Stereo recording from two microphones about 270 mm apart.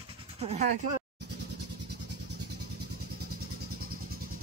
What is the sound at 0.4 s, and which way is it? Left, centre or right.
Speech, right.